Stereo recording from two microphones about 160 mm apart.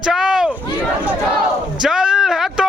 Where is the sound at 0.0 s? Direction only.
5° right (ahead or behind).